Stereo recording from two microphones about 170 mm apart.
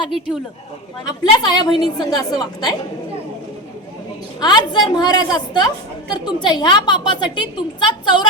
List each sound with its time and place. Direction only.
1.0 s a woman's voice: 25° left (ahead or behind)
4.4 s a woman's voice: 25° left (ahead or behind)